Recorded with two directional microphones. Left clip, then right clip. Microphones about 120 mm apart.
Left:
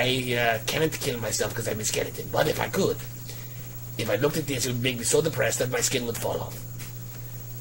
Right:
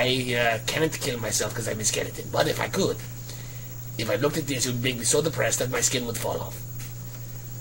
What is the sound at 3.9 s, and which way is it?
Speech, 30° left (ahead or behind).